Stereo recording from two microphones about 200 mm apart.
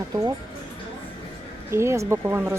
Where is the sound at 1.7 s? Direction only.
15° right (ahead or behind).